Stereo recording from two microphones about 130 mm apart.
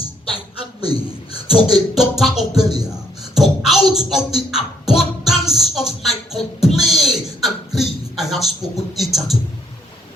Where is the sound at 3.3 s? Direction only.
5° right (ahead or behind).